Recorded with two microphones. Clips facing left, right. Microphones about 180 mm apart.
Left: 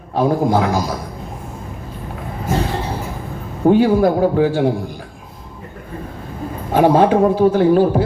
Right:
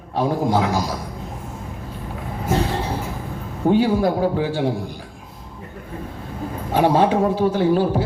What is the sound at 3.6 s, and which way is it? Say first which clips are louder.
A man's voice: left 5 dB; 50° left (ahead or behind).